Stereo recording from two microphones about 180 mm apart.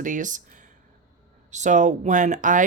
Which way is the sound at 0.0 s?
45° right (ahead or behind).